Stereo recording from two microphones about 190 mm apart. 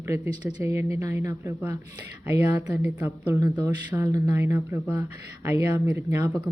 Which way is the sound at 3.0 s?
15° right (ahead or behind).